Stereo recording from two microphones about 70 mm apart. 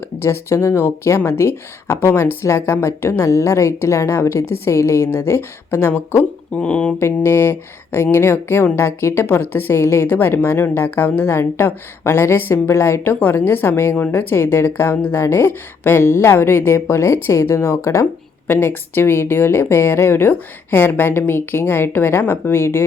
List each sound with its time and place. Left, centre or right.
0.2 s speech: left
6.6 s speech: centre
7.0 s speech: left